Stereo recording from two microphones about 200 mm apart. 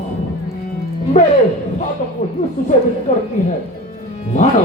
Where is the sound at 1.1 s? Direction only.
35° left (ahead or behind).